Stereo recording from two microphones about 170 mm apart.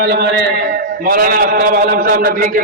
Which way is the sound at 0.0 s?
70° right (ahead or behind).